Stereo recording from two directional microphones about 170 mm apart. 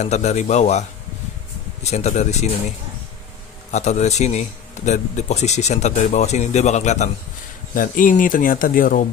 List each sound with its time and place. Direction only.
0.0 s speech: 40° left (ahead or behind)
3.7 s a man's voice: 45° left (ahead or behind)